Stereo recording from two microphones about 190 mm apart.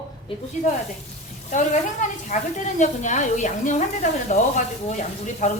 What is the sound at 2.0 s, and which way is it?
A woman's voice, 40° left (ahead or behind).